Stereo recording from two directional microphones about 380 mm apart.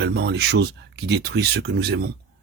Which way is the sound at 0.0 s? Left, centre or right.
Right.